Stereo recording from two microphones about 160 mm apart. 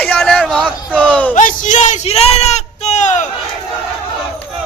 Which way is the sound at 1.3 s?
55° left (ahead or behind).